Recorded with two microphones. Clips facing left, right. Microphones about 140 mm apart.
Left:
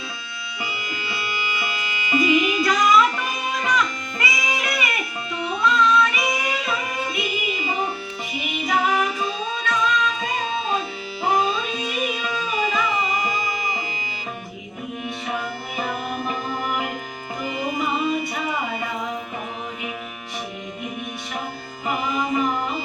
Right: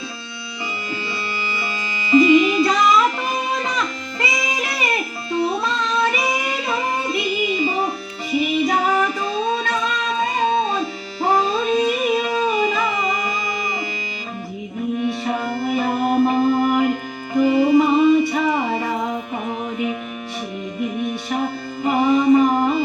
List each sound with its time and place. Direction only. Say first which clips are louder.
2.2 s music: right 2 dB; 30° right (ahead or behind)
8.4 s music: right 5 dB; 35° right (ahead or behind)
15.2 s music: right 6 dB; 40° right (ahead or behind)
21.8 s music: right 10 dB; 30° right (ahead or behind)